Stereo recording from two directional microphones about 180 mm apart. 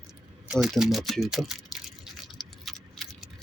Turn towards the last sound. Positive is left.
turn(degrees=0)  # may be behind; listen again after turning